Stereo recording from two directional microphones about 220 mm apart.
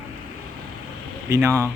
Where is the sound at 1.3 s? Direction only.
15° right (ahead or behind).